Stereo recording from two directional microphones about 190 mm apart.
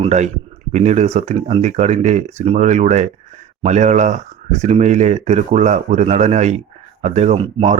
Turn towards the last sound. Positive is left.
turn(degrees=-30)  # may be behind; listen again after turning